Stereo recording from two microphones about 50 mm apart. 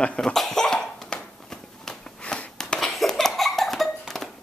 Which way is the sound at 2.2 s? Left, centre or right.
Left.